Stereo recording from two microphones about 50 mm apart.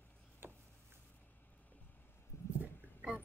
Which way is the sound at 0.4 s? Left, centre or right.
Right.